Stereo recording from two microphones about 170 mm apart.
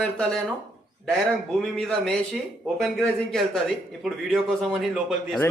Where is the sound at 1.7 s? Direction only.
5° left (ahead or behind).